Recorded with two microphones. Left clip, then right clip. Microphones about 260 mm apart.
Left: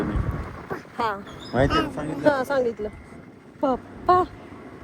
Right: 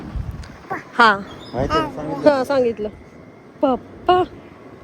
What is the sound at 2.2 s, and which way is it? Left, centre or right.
A woman's voice, right.